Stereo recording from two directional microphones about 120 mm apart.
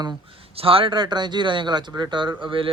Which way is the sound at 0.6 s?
50° right (ahead or behind).